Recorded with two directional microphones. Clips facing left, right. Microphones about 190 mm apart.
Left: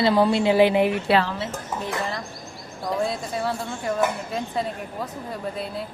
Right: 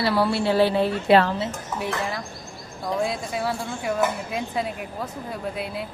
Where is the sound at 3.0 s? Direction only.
Centre (ahead or behind).